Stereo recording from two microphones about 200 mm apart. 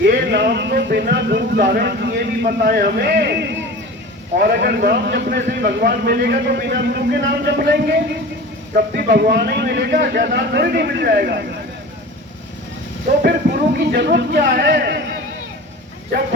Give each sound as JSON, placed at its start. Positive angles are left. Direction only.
{"t": 0.0, "sound": "a man's voice", "side_deg": -50}
{"t": 13.7, "sound": "a man's voice", "side_deg": -55}